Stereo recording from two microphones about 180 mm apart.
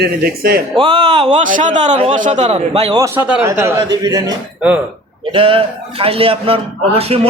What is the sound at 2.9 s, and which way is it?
A man's voice, 20° right (ahead or behind).